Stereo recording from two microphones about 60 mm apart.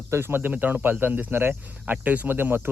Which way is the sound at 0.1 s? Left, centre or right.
Right.